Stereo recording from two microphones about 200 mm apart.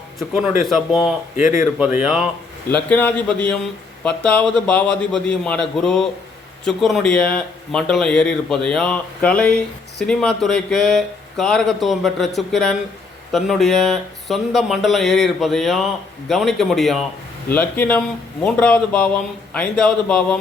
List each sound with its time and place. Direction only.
0.2 s speech: centre (ahead or behind)
1.4 s speech: 40° left (ahead or behind)
1.8 s speech: 5° right (ahead or behind)
2.9 s a man's voice: 10° left (ahead or behind)